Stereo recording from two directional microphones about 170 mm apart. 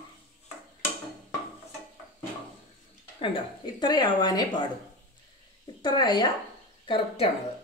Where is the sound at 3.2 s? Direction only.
30° left (ahead or behind).